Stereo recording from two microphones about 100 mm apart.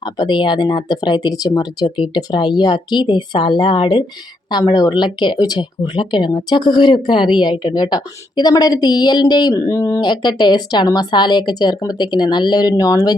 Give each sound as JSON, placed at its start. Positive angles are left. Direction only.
{"t": 0.0, "sound": "speech", "side_deg": 45}
{"t": 10.0, "sound": "speech", "side_deg": 50}